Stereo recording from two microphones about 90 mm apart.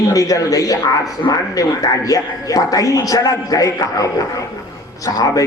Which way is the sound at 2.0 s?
40° left (ahead or behind).